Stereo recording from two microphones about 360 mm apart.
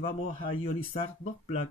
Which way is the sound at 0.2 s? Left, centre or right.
Left.